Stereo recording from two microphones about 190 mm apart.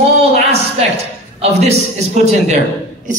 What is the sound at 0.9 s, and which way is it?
A man's voice, 35° right (ahead or behind).